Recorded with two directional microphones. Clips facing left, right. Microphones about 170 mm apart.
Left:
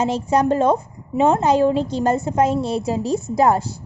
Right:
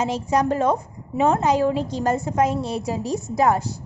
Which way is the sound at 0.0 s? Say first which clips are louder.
Left 3 dB; 30° left (ahead or behind).